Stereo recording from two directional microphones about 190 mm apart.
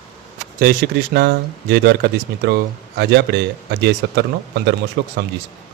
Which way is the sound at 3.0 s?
60° right (ahead or behind).